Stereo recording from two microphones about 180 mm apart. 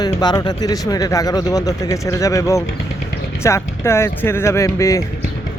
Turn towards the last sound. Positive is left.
turn(degrees=20)  # may be behind; listen again after turning